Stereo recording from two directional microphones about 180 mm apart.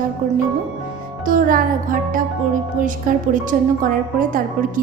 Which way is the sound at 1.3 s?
50° right (ahead or behind).